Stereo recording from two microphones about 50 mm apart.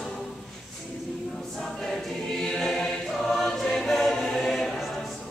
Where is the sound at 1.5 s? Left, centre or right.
Centre.